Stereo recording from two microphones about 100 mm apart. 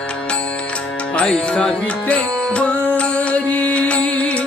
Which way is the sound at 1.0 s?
10° left (ahead or behind).